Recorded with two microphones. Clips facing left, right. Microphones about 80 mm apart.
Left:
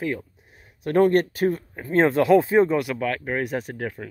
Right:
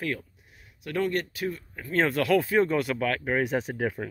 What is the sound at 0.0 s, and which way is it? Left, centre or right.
Speech, centre.